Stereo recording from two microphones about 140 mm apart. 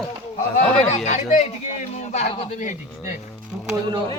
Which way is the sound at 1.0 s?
55° left (ahead or behind).